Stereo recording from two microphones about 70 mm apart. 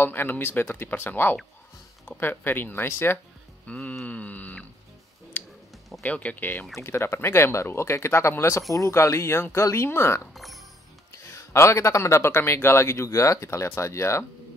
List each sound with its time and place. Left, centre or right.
0.0 s speech: left
3.6 s music: centre
4.0 s a sound: left
6.0 s speech: left
6.8 s speech: left
10.3 s speech: centre
11.2 s a man's voice: left